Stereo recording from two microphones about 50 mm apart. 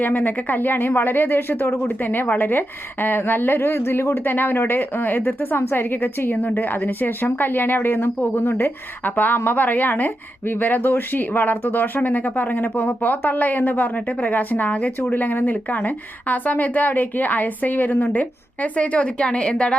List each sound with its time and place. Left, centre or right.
0.0 s a woman's voice: left
6.3 s a woman's voice: left